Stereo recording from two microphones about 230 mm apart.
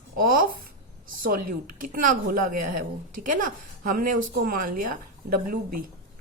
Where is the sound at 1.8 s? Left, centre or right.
Right.